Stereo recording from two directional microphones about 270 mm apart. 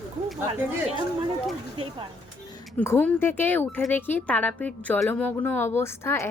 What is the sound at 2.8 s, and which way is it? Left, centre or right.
Speech, centre.